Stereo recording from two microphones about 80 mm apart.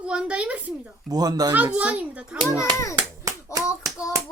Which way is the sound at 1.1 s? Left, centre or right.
Right.